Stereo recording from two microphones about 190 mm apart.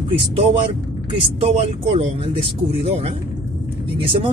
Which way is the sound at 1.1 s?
30° right (ahead or behind).